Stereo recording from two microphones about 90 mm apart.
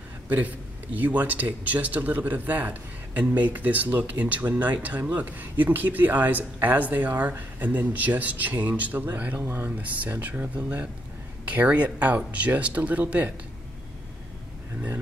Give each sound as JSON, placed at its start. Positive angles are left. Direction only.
{"t": 0.3, "sound": "speech", "side_deg": -20}
{"t": 9.7, "sound": "speech", "side_deg": -15}